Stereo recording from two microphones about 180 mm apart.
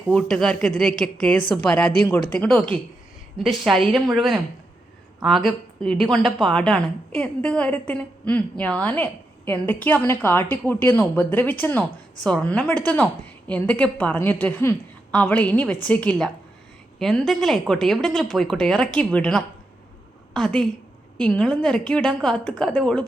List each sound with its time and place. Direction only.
0.1 s a woman's voice: 5° left (ahead or behind)